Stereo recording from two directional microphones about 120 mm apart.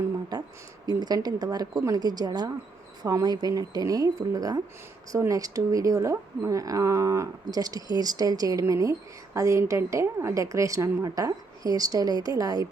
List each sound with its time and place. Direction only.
0.9 s speech: 35° right (ahead or behind)